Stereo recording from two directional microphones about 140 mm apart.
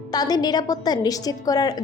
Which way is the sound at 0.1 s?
30° left (ahead or behind).